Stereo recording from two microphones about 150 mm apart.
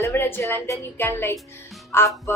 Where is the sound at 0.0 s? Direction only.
15° left (ahead or behind).